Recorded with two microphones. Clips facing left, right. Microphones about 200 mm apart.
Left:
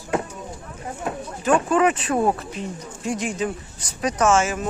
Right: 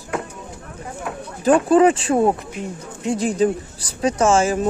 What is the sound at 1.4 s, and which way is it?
Speech, 35° right (ahead or behind).